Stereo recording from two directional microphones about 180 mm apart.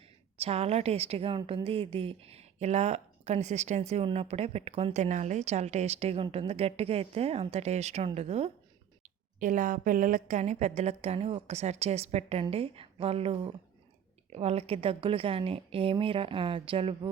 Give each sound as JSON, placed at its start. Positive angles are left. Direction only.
{"t": 0.3, "sound": "a woman's voice", "side_deg": -35}
{"t": 9.4, "sound": "a woman's voice", "side_deg": -45}